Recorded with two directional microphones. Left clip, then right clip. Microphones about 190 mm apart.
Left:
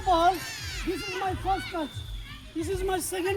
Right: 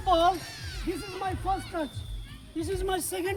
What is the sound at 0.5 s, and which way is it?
Speech, 35° left (ahead or behind).